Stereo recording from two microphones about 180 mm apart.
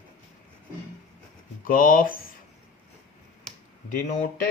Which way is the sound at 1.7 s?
50° left (ahead or behind).